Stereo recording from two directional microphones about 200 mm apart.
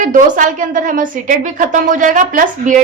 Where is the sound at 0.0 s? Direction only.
40° right (ahead or behind).